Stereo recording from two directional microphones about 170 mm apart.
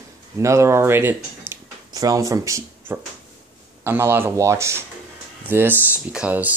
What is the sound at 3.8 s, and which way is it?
Speech, 15° right (ahead or behind).